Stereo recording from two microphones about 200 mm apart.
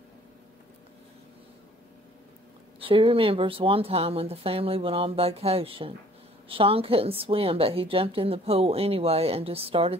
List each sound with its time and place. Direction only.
2.8 s a woman's voice: 25° right (ahead or behind)